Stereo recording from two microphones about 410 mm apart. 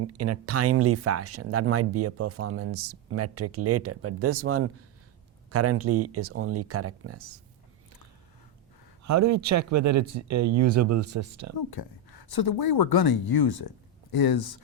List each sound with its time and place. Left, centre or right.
0.0 s speech: right
9.0 s speech: right
11.7 s speech: left